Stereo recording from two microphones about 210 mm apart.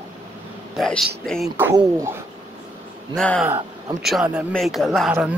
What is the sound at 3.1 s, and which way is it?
A woman's voice, 5° left (ahead or behind).